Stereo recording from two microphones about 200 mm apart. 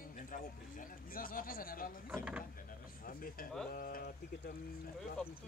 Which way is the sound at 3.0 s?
45° left (ahead or behind).